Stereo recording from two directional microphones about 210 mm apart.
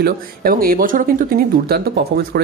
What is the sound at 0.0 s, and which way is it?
Speech, 45° right (ahead or behind).